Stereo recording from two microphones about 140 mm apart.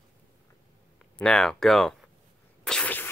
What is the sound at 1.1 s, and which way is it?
Speech, 5° left (ahead or behind).